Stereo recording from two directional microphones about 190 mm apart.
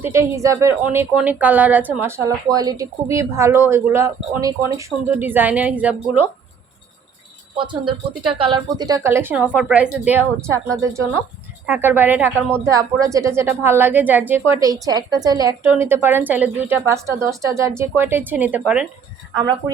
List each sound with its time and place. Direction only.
0.0 s a woman's voice: 15° right (ahead or behind)
7.5 s a woman's voice: 25° right (ahead or behind); by 18.9 s 5° right (ahead or behind)